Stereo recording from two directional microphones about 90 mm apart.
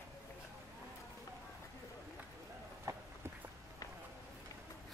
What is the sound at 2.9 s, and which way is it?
Run, 35° right (ahead or behind).